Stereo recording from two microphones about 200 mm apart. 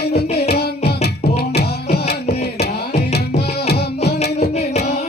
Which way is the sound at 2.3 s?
55° left (ahead or behind).